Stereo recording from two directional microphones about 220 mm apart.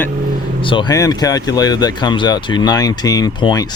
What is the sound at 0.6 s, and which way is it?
Speech, 20° left (ahead or behind).